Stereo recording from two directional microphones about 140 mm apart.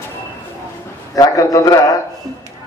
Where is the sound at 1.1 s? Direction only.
25° left (ahead or behind).